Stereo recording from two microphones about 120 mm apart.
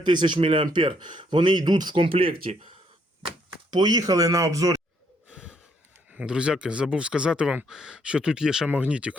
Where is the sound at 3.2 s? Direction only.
40° right (ahead or behind).